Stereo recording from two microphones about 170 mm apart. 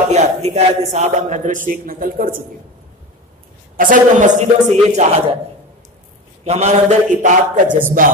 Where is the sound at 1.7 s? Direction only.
55° right (ahead or behind).